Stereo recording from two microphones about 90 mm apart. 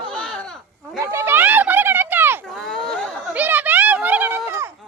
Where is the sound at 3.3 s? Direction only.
20° right (ahead or behind).